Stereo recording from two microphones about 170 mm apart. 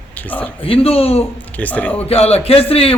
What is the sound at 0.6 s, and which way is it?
Speech, 35° left (ahead or behind).